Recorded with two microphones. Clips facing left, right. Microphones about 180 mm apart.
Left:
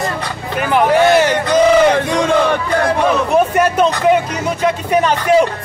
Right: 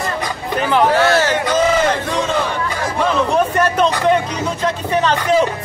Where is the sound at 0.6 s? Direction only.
10° left (ahead or behind).